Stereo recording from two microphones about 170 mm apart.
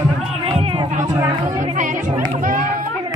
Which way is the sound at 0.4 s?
35° right (ahead or behind).